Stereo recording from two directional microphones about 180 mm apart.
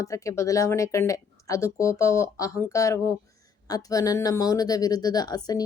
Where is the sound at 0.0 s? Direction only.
15° left (ahead or behind).